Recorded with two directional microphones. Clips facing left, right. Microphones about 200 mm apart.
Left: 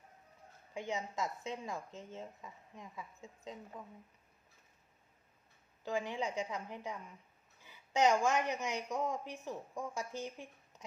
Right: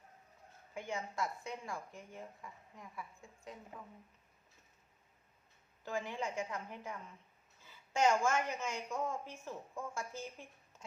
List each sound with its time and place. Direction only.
0.7 s speech: 20° left (ahead or behind)
5.8 s a woman's voice: 15° left (ahead or behind)